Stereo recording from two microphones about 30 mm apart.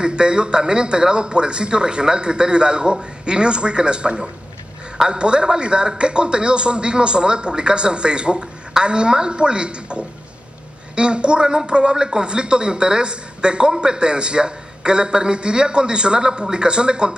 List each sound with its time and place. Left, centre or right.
0.0 s a man's voice: right